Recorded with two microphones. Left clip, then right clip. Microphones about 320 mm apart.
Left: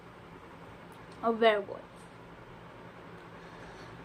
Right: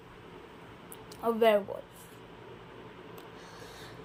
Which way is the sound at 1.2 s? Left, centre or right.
Right.